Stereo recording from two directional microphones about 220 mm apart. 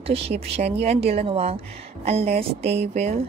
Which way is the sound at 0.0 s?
25° right (ahead or behind).